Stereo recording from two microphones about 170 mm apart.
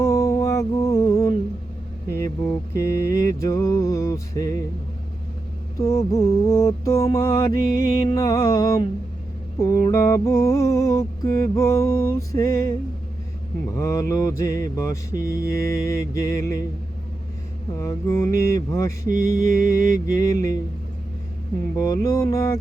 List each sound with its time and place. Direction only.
0.0 s music: 20° left (ahead or behind)
2.0 s mantra: 15° left (ahead or behind)
5.8 s mantra: 20° left (ahead or behind)
13.7 s mantra: 20° left (ahead or behind)
17.7 s mantra: 20° left (ahead or behind)
21.8 s mantra: 20° left (ahead or behind)